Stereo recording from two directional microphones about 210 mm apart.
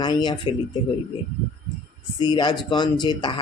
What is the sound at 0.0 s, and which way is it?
Speech, 20° left (ahead or behind).